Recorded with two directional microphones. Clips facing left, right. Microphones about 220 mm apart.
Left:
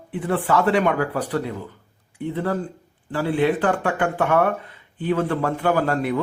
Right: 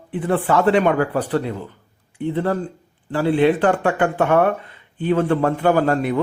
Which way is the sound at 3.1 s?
25° right (ahead or behind).